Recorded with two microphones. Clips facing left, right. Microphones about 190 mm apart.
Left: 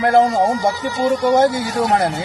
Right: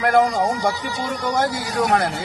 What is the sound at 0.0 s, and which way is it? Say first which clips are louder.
Speech: left 3 dB; 25° left (ahead or behind).